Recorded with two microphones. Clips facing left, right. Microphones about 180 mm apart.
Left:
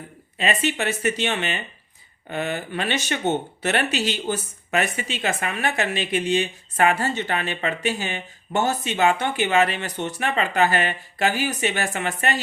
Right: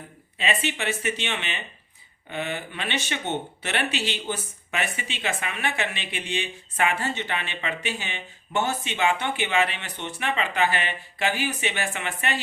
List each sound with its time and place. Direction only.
0.3 s speech: 45° left (ahead or behind)